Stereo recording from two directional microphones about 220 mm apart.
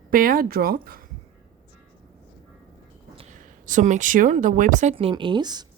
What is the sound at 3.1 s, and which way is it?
Speech, 35° right (ahead or behind).